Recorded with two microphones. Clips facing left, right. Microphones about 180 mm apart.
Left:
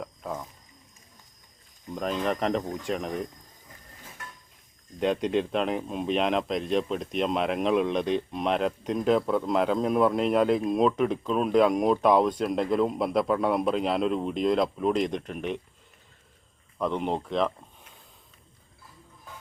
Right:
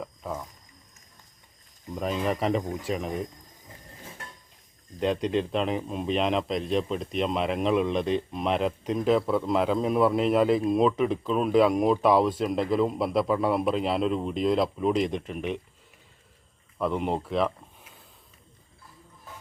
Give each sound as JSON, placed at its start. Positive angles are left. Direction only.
{"t": 0.0, "sound": "a sound", "side_deg": 0}
{"t": 1.9, "sound": "speech", "side_deg": -5}
{"t": 4.2, "sound": "dishes", "side_deg": -30}
{"t": 4.9, "sound": "speech", "side_deg": 0}
{"t": 16.7, "sound": "speech", "side_deg": 0}